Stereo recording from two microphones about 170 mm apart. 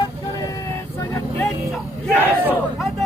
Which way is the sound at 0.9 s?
20° left (ahead or behind).